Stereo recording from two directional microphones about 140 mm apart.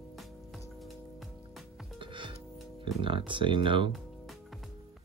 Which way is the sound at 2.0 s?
35° right (ahead or behind).